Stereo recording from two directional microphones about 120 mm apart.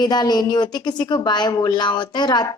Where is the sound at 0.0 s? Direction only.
35° left (ahead or behind).